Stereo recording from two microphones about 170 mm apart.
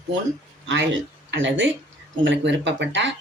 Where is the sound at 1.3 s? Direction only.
90° right.